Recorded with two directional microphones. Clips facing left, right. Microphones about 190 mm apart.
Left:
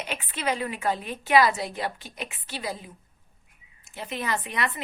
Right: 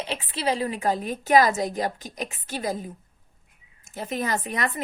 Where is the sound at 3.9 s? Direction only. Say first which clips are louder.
Right 3 dB; 40° right (ahead or behind).